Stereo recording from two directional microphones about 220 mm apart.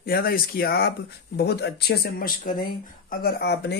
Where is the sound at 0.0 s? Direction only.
45° left (ahead or behind).